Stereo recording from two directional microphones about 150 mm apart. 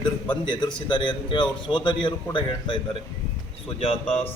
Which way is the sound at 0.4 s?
30° left (ahead or behind).